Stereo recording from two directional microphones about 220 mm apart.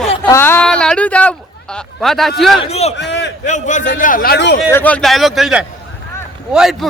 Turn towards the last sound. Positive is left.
turn(degrees=0)  # may be behind; listen again after turning